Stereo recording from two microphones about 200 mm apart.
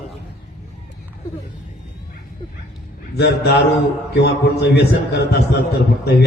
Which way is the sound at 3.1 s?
55° left (ahead or behind).